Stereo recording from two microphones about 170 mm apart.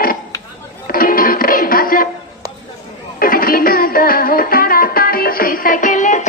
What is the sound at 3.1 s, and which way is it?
Music, 55° left (ahead or behind).